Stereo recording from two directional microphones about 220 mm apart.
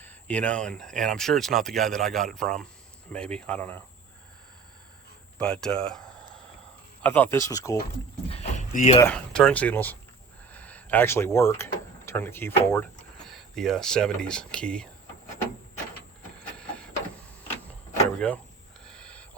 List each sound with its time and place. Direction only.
0.0 s speech: 5° left (ahead or behind)
5.4 s speech: 5° left (ahead or behind)
7.0 s speech: 10° left (ahead or behind)
8.3 s a sound: 30° left (ahead or behind)
9.0 s speech: 5° left (ahead or behind)
16.6 s printer: 5° left (ahead or behind)
18.2 s speech: 5° left (ahead or behind)
18.9 s a sound: 5° left (ahead or behind)